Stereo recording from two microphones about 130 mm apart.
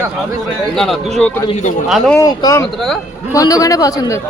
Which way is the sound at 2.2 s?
30° left (ahead or behind).